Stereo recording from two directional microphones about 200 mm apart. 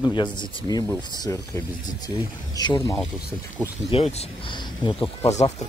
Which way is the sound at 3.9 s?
30° left (ahead or behind).